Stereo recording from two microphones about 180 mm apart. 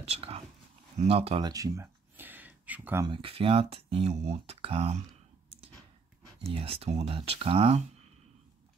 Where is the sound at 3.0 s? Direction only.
30° right (ahead or behind).